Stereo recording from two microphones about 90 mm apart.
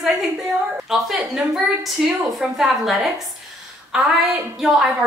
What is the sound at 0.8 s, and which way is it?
A woman's voice, centre (ahead or behind).